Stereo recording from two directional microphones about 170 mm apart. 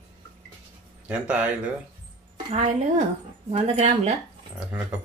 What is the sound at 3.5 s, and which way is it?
Speech, 40° right (ahead or behind).